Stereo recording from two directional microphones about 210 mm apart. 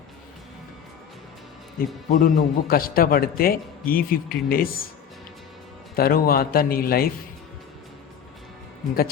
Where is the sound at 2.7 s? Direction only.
45° left (ahead or behind).